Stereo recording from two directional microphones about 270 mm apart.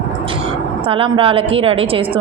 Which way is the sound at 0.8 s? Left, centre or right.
Centre.